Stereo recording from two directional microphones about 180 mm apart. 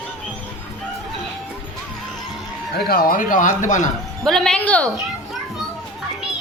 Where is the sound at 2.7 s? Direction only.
55° left (ahead or behind).